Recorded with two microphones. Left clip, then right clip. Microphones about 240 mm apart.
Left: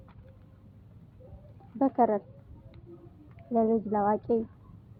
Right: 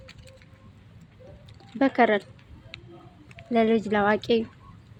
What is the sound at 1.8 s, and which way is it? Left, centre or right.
Speech, right.